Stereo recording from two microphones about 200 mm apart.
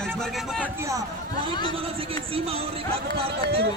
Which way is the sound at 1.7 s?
30° right (ahead or behind).